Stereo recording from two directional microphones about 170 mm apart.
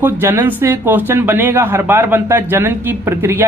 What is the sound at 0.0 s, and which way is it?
Speech, 15° right (ahead or behind).